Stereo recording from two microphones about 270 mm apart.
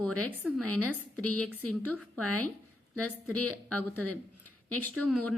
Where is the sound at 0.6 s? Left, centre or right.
Right.